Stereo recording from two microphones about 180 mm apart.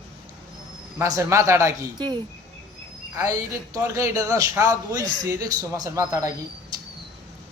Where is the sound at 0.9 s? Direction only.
15° right (ahead or behind).